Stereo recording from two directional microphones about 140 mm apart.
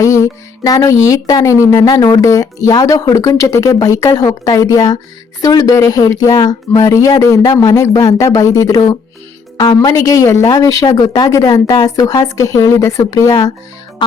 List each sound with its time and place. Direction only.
0.0 s music: 25° left (ahead or behind)
1.0 s speech: 25° left (ahead or behind)